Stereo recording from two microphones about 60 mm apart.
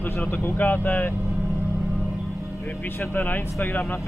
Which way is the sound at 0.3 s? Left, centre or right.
Left.